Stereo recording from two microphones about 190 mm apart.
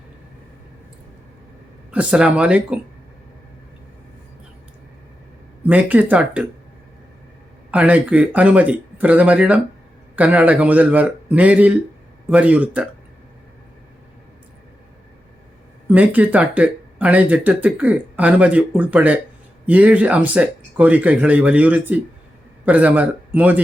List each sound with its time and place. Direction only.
1.9 s speech: 5° right (ahead or behind)
5.6 s speech: 5° right (ahead or behind)
7.7 s speech: 10° right (ahead or behind)
15.9 s speech: 10° right (ahead or behind)